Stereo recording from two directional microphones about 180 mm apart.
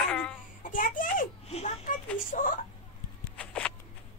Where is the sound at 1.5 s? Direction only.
35° left (ahead or behind).